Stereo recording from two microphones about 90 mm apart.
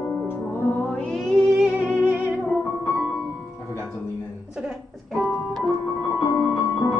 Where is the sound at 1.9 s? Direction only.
20° right (ahead or behind).